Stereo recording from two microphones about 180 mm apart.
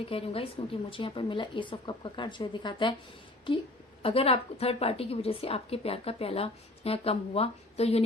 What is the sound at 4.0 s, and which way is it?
A woman's voice, 30° left (ahead or behind).